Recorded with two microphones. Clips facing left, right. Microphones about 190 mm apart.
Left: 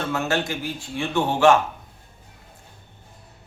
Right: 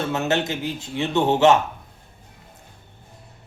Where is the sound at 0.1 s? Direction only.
20° right (ahead or behind).